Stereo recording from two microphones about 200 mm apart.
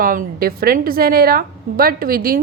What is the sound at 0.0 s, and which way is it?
A woman's voice, 45° right (ahead or behind).